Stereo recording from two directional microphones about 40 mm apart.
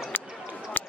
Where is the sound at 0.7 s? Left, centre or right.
Left.